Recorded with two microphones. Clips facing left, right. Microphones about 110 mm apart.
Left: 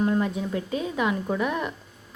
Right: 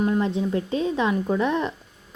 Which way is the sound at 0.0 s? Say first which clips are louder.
Right 2 dB; 25° right (ahead or behind).